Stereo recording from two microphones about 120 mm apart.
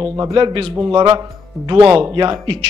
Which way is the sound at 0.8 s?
35° right (ahead or behind).